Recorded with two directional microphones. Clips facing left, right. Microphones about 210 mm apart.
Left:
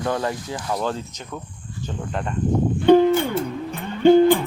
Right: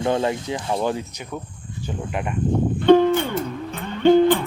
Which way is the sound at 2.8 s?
10° left (ahead or behind).